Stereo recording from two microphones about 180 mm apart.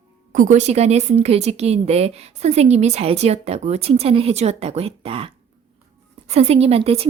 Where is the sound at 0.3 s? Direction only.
45° right (ahead or behind).